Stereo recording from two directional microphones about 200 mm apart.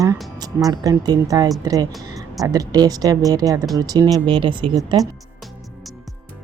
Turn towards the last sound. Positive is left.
turn(degrees=-20)  # may be behind; listen again after turning